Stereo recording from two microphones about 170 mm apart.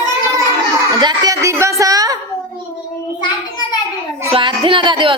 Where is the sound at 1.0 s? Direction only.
20° right (ahead or behind).